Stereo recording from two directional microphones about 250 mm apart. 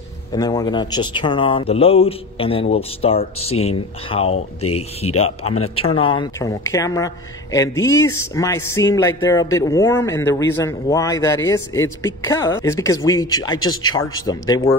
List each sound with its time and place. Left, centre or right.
0.3 s speech: centre